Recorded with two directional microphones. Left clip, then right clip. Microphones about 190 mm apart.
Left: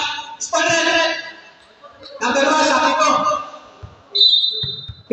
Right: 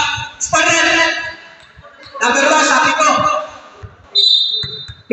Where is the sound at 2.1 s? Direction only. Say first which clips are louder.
Right 4 dB; 25° right (ahead or behind).